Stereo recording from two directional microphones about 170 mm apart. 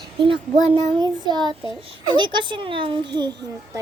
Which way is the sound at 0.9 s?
25° right (ahead or behind).